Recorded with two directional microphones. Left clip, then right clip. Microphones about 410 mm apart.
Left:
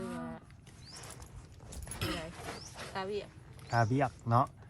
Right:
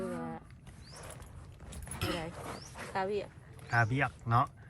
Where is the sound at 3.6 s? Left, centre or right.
Centre.